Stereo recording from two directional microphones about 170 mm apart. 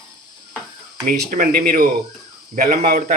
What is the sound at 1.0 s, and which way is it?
Speech, 60° right (ahead or behind).